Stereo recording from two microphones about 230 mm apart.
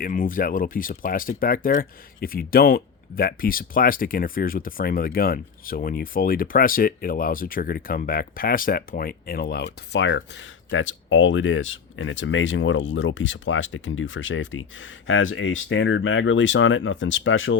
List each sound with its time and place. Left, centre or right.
0.0 s speech: left